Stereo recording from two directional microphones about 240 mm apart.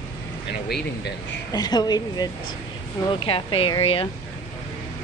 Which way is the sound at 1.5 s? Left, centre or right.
Centre.